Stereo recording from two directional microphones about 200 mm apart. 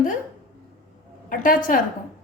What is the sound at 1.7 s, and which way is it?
Speech, 40° left (ahead or behind).